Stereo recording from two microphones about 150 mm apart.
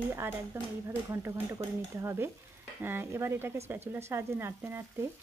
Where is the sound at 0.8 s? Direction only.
20° right (ahead or behind).